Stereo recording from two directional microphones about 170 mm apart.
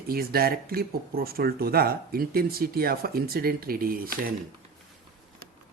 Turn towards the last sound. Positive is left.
turn(degrees=-60)  # may be behind; listen again after turning